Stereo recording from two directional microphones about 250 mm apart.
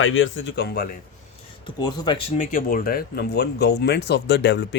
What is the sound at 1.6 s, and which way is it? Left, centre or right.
Speech, centre.